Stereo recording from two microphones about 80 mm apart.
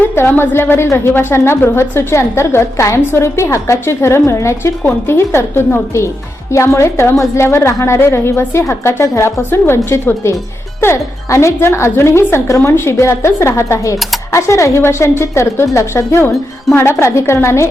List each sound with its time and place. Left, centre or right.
0.0 s a woman's voice: left